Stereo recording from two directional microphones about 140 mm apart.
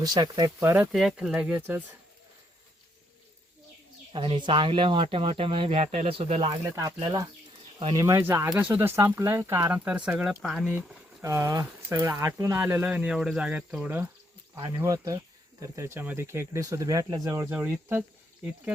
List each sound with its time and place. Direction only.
0.0 s speech: 30° right (ahead or behind)
0.9 s speech: 5° right (ahead or behind)
4.1 s speech: 35° right (ahead or behind)
6.7 s speech: 25° right (ahead or behind); by 10.8 s centre (ahead or behind)
11.2 s speech: 20° right (ahead or behind)